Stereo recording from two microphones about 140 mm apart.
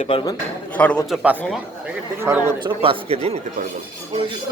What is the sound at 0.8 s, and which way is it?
Speech, 10° left (ahead or behind).